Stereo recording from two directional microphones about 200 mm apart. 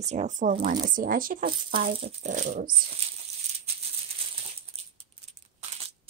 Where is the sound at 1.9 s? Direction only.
30° right (ahead or behind).